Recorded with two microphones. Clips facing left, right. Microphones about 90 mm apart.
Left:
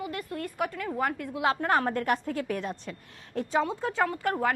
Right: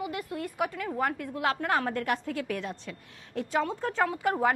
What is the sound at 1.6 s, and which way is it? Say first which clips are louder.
A woman's voice: left 2 dB; 40° left (ahead or behind).